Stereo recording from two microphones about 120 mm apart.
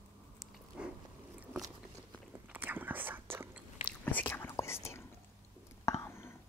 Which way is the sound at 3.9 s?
15° left (ahead or behind).